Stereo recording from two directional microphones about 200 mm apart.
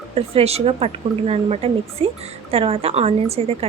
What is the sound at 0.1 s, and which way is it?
Speech, 30° right (ahead or behind).